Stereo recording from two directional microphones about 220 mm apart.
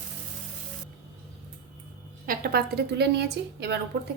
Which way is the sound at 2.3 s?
45° right (ahead or behind).